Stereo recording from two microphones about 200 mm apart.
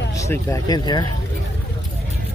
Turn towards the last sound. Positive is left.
turn(degrees=20)  # may be behind; listen again after turning